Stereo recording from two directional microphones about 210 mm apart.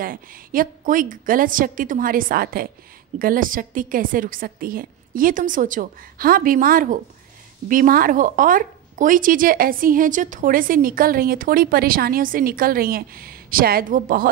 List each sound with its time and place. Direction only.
0.0 s speech: 40° right (ahead or behind)